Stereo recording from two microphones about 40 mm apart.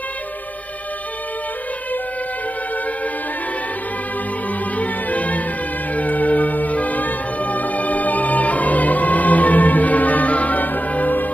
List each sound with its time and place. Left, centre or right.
4.7 s music: left